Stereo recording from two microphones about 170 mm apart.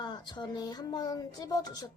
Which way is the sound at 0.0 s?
25° left (ahead or behind).